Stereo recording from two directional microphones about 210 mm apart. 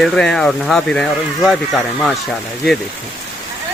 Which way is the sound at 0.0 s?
5° left (ahead or behind).